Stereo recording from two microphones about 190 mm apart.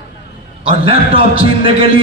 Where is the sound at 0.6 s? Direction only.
30° right (ahead or behind).